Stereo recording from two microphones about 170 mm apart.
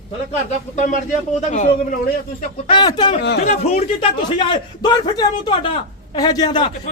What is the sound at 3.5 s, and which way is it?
Speech, 40° left (ahead or behind).